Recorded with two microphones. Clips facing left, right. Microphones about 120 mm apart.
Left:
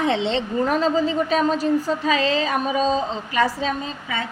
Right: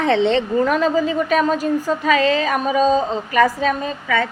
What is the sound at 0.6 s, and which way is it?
Speech, 55° right (ahead or behind).